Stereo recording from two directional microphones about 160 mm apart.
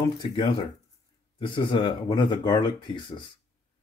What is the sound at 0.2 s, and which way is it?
Speech, 30° left (ahead or behind).